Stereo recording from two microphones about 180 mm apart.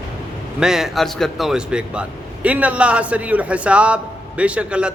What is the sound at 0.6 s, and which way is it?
A man's voice, centre (ahead or behind).